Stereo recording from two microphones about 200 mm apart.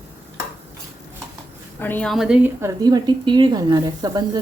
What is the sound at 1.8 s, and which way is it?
A woman's voice, 10° left (ahead or behind).